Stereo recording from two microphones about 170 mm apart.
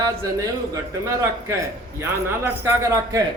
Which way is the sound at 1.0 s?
15° right (ahead or behind).